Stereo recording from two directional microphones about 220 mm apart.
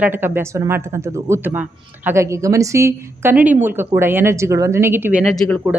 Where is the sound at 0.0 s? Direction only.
10° right (ahead or behind).